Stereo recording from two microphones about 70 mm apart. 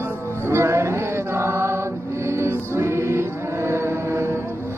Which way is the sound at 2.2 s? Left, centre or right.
Right.